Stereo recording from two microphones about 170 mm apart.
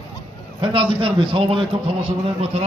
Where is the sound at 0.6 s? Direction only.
30° right (ahead or behind).